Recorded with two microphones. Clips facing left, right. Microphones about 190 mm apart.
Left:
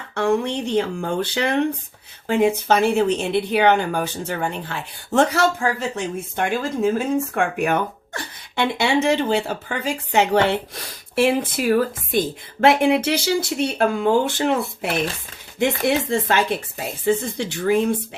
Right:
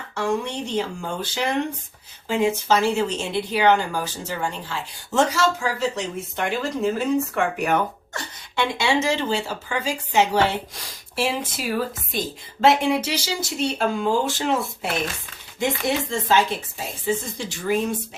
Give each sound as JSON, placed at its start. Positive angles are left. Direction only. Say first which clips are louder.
{"t": 0.1, "sound": "speech", "louder": "left 5 dB", "side_deg": 55}